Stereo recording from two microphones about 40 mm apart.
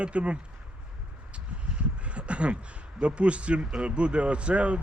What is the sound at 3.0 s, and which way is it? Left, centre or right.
A man's voice, right.